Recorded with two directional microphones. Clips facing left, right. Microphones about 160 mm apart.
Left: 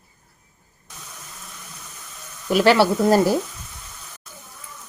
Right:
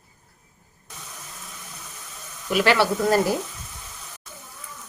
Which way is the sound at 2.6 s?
35° left (ahead or behind).